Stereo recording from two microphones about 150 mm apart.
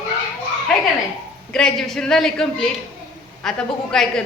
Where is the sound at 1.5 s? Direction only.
5° left (ahead or behind).